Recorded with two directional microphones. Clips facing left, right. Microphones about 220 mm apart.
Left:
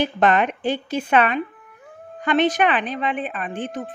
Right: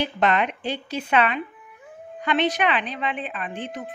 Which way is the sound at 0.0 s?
50° left (ahead or behind).